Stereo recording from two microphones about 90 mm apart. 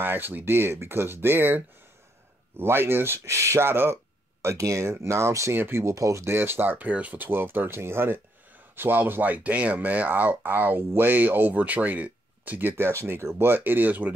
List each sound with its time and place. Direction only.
0.0 s speech: 20° right (ahead or behind)
2.6 s speech: 25° right (ahead or behind)